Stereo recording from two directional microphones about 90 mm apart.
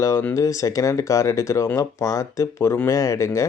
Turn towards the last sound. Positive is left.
turn(degrees=35)  # may be behind; listen again after turning